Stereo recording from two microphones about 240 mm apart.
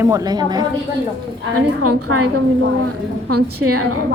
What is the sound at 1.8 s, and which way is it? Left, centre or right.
Speech, right.